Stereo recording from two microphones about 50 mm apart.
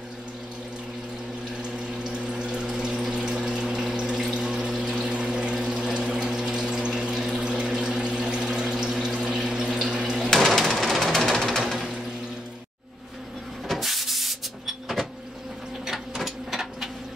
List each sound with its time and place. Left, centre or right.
2.0 s pump: right
5.9 s engine: centre
6.6 s pump: centre
10.3 s bird: centre
11.1 s music: centre
13.7 s a sound: centre
15.8 s printer: centre